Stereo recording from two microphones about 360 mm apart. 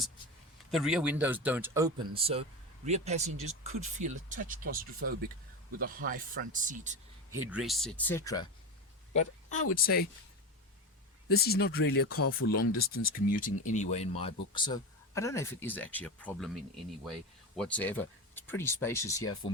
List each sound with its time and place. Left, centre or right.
0.7 s speech: centre; by 7.0 s right
7.3 s speech: centre
9.1 s speech: centre
11.3 s speech: left; by 19.2 s centre